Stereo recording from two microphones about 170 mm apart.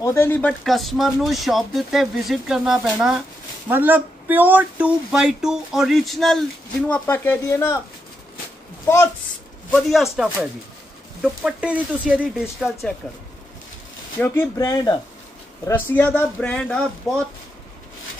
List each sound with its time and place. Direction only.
0.0 s a man's voice: 15° left (ahead or behind)
8.8 s speech: 15° left (ahead or behind)
9.8 s speech: centre (ahead or behind)
14.2 s speech: 5° left (ahead or behind)
14.6 s speech: 25° left (ahead or behind)
15.6 s a man's voice: 10° left (ahead or behind)